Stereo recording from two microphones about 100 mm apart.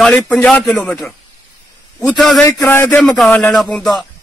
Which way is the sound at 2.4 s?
30° left (ahead or behind).